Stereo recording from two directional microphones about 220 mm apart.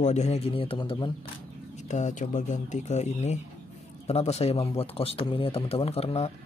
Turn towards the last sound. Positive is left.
turn(degrees=30)  # may be behind; listen again after turning